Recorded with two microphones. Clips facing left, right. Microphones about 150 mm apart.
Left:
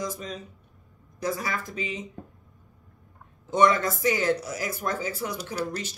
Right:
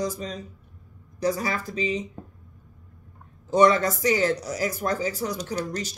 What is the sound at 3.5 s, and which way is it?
Speech, 35° right (ahead or behind).